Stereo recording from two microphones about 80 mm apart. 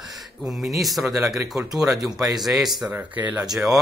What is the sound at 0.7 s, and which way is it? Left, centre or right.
Speech, centre.